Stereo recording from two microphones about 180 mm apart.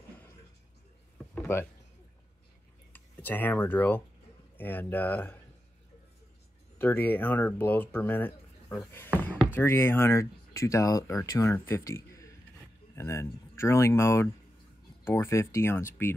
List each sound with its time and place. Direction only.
1.1 s a sound: centre (ahead or behind)
2.9 s speech: 10° left (ahead or behind)
6.8 s speech: 10° left (ahead or behind)